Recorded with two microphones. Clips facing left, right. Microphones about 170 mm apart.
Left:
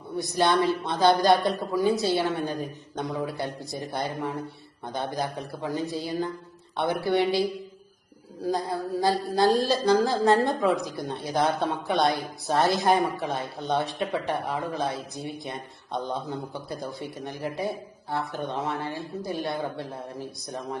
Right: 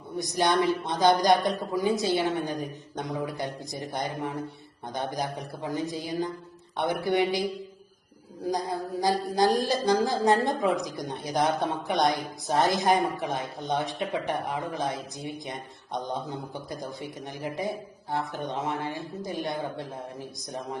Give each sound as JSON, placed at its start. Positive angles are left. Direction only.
{"t": 0.2, "sound": "a man's voice", "side_deg": -20}
{"t": 8.4, "sound": "a man's voice", "side_deg": -20}